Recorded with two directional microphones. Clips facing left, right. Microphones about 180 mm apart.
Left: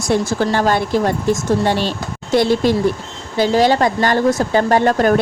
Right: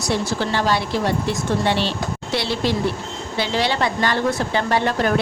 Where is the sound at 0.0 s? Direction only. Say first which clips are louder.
Left 5 dB; 50° left (ahead or behind).